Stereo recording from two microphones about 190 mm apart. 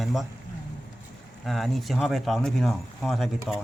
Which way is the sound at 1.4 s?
Centre (ahead or behind).